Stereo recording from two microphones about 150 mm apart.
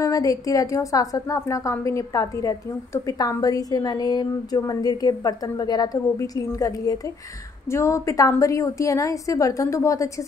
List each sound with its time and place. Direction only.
0.0 s a woman's voice: 20° left (ahead or behind)